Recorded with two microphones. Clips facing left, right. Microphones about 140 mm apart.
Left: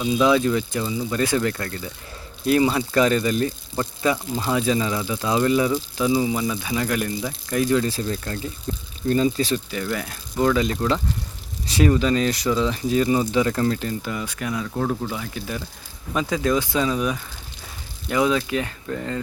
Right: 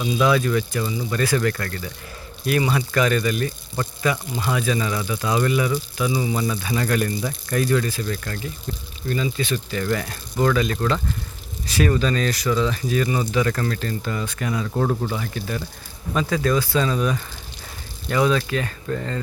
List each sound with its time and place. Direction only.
0.0 s speech: 20° left (ahead or behind); by 9.6 s 35° left (ahead or behind)
9.6 s speech: 10° left (ahead or behind)
10.5 s speech: 20° left (ahead or behind)
11.9 s speech: 15° left (ahead or behind); by 14.9 s 5° right (ahead or behind)
15.0 s speech: 10° left (ahead or behind)